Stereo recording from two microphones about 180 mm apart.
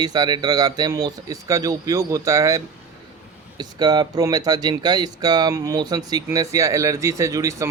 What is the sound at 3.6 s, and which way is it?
Speech, 25° right (ahead or behind).